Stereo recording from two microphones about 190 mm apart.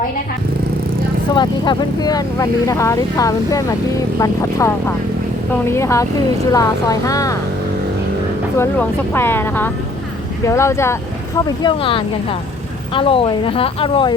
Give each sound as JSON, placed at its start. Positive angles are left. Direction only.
{"t": 1.3, "sound": "speech", "side_deg": 25}
{"t": 8.5, "sound": "speech", "side_deg": 10}
{"t": 11.6, "sound": "speech", "side_deg": 25}